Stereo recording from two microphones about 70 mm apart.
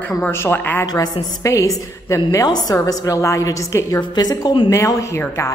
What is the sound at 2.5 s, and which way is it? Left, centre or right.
Speech, left.